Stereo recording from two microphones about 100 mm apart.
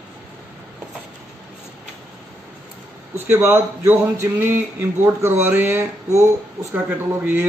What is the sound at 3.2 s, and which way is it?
Speech, 20° right (ahead or behind).